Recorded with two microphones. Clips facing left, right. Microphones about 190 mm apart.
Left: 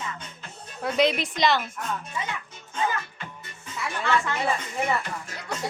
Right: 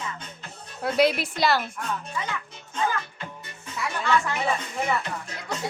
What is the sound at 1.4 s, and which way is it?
Snicker, 5° right (ahead or behind).